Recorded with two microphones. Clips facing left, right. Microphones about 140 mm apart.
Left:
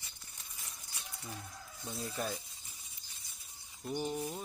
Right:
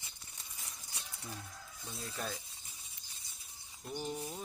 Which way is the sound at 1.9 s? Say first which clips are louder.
Left 5 dB; 25° left (ahead or behind).